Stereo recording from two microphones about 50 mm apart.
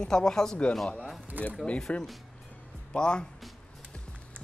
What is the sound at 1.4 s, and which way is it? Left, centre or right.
Speech, right.